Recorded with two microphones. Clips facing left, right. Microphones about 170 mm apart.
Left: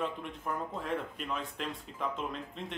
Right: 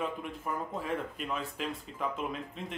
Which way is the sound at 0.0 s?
5° right (ahead or behind).